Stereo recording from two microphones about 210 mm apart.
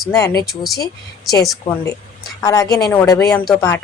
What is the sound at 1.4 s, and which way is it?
Speech, centre (ahead or behind).